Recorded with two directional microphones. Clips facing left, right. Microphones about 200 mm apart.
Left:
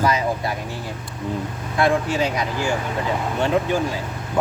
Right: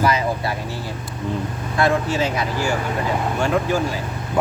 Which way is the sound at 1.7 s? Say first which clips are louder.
Even; 15° left (ahead or behind).